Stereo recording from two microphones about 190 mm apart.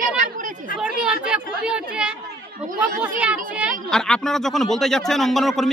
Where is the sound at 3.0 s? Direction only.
5° right (ahead or behind).